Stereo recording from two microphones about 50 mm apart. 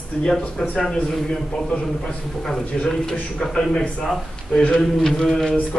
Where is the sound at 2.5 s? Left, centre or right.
Centre.